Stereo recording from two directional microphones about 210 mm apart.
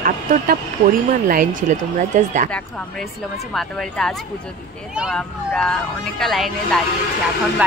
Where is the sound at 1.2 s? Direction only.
40° right (ahead or behind).